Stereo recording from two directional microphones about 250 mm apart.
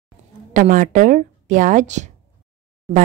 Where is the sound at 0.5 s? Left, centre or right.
Right.